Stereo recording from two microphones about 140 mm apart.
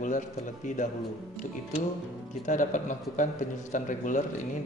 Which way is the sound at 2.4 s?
65° left (ahead or behind).